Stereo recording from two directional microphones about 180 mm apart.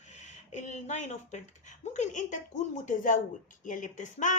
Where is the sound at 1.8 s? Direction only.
40° left (ahead or behind).